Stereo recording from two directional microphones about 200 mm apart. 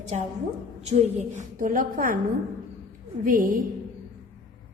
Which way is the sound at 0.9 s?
35° right (ahead or behind).